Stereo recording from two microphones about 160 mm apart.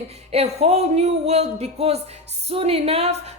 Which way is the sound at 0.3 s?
40° right (ahead or behind).